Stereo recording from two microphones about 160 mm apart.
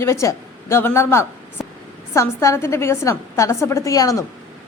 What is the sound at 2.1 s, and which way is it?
A woman's voice, 20° left (ahead or behind).